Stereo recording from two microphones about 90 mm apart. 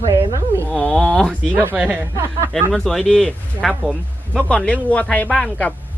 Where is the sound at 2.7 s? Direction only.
5° left (ahead or behind).